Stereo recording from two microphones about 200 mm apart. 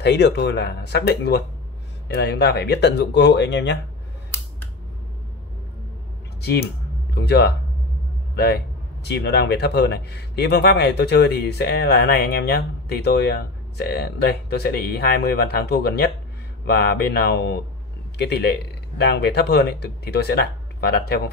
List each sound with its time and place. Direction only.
0.0 s speech: 60° left (ahead or behind)
7.2 s speech: 55° left (ahead or behind)
9.0 s speech: 55° left (ahead or behind)